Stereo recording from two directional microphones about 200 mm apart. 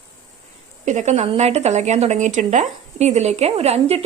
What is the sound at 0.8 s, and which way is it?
Speech, 35° right (ahead or behind).